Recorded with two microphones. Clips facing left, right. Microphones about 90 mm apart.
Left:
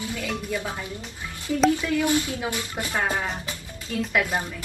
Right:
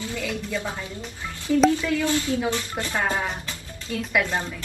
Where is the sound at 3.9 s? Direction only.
Centre (ahead or behind).